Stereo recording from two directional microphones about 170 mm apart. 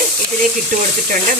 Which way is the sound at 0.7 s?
50° right (ahead or behind).